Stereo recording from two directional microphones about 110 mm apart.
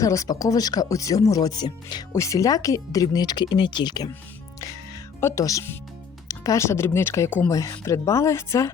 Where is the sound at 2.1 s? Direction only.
30° left (ahead or behind).